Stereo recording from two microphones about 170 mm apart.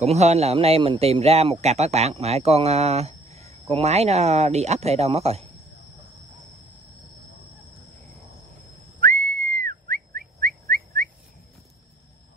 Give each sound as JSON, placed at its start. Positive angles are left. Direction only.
{"t": 0.0, "sound": "speech", "side_deg": -40}
{"t": 9.0, "sound": "whistling", "side_deg": -55}